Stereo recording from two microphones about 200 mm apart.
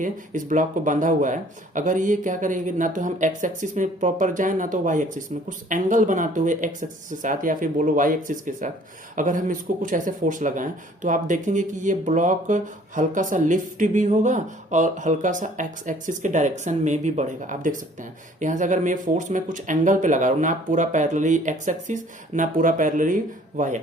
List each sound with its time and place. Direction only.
0.0 s speech: 40° right (ahead or behind)